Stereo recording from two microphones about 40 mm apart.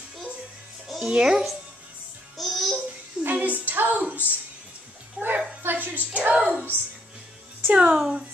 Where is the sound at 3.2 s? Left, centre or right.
Right.